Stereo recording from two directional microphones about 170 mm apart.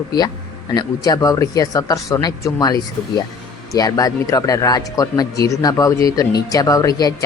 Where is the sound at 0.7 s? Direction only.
25° left (ahead or behind).